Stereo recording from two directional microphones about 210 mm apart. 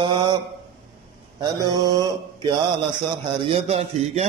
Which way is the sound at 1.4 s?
20° right (ahead or behind).